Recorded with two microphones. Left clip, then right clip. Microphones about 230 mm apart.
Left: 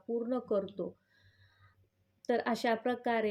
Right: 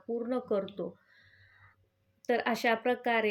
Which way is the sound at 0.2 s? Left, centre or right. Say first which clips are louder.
Right 1 dB; right.